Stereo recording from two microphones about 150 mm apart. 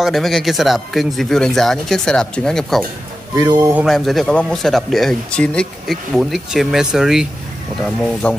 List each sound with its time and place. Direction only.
0.0 s speech: centre (ahead or behind)
3.3 s speech: 25° right (ahead or behind)
3.8 s speech: centre (ahead or behind)
7.8 s speech: 5° left (ahead or behind)